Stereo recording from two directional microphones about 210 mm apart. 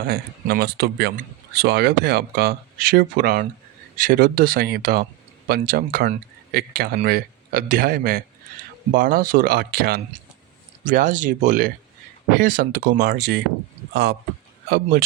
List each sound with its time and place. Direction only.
0.0 s speech: 50° right (ahead or behind)